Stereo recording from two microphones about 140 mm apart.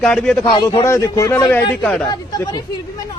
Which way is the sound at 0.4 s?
35° left (ahead or behind).